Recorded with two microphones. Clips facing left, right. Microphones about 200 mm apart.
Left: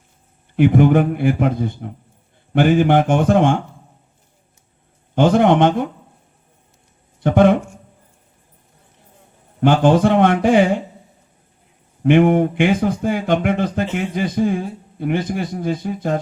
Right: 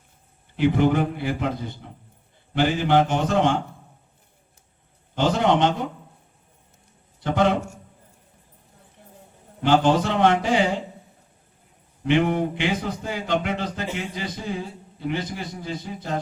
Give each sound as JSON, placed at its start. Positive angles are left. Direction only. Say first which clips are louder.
{"t": 0.5, "sound": "a man's voice", "louder": "left 6 dB", "side_deg": 55}
{"t": 5.1, "sound": "a man's voice", "louder": "left 7 dB", "side_deg": 55}
{"t": 7.2, "sound": "a man's voice", "louder": "left 8 dB", "side_deg": 55}
{"t": 9.6, "sound": "a man's voice", "louder": "left 5 dB", "side_deg": 55}
{"t": 12.0, "sound": "a man's voice", "louder": "left 8 dB", "side_deg": 50}